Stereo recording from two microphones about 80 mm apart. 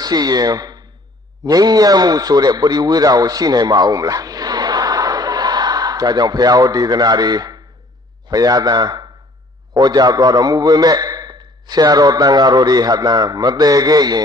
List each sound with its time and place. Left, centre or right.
0.0 s a man's voice: right